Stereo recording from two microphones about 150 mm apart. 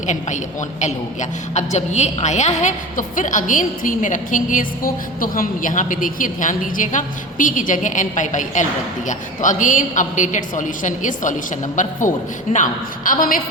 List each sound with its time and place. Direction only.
0.8 s a woman's voice: 50° left (ahead or behind)